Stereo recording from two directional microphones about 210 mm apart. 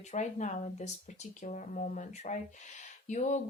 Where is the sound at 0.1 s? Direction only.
35° left (ahead or behind).